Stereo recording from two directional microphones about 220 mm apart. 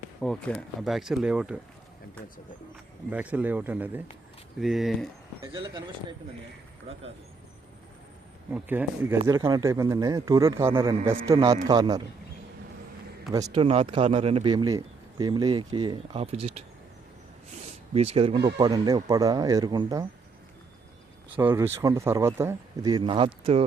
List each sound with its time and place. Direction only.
0.2 s speech: 5° left (ahead or behind)
3.1 s speech: 5° right (ahead or behind)
5.4 s speech: 25° right (ahead or behind)
8.5 s speech: 5° right (ahead or behind)
13.3 s speech: 20° right (ahead or behind)
21.3 s speech: 10° right (ahead or behind); by 23.6 s 25° right (ahead or behind)